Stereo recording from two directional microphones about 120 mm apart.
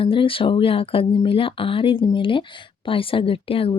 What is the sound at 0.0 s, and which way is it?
Speech, 45° left (ahead or behind).